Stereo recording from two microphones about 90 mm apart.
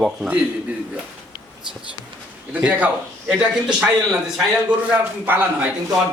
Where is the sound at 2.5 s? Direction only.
15° right (ahead or behind).